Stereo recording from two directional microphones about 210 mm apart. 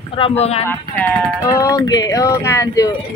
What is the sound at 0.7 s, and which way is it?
Speech, 15° left (ahead or behind).